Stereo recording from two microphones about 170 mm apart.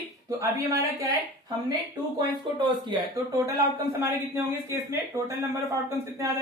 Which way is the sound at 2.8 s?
20° right (ahead or behind).